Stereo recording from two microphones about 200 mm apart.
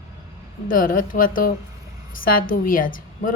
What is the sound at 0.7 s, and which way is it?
A woman's voice, 45° left (ahead or behind).